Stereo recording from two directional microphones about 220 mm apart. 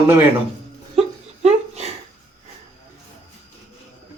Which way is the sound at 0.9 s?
30° right (ahead or behind).